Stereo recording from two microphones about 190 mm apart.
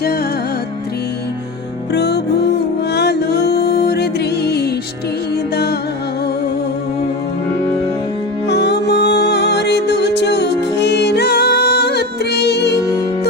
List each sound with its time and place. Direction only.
1.9 s music: 60° left (ahead or behind)
8.4 s music: 60° left (ahead or behind)